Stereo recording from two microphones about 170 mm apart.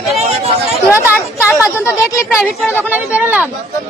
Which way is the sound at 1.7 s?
15° left (ahead or behind).